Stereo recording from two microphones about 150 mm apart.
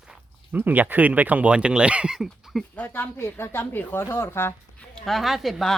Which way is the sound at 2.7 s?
10° left (ahead or behind).